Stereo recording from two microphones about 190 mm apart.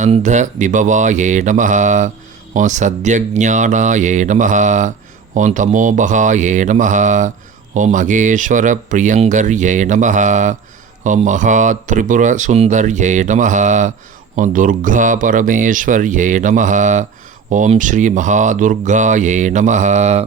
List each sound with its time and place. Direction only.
0.0 s speech: 40° right (ahead or behind)